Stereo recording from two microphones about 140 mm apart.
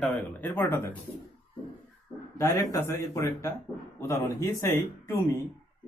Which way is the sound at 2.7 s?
20° left (ahead or behind).